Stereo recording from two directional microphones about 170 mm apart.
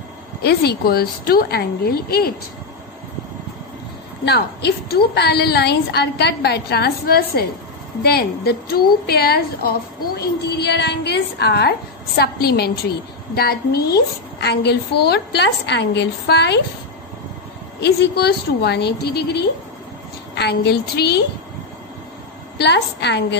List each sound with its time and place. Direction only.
0.4 s a woman's voice: 70° left (ahead or behind)
4.2 s a woman's voice: 75° left (ahead or behind)
17.7 s a woman's voice: 80° left
22.6 s a woman's voice: 80° left